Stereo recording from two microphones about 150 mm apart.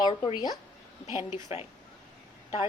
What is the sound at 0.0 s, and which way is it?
Speech, 30° left (ahead or behind).